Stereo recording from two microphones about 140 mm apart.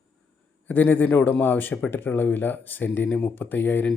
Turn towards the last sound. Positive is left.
turn(degrees=15)  # may be behind; listen again after turning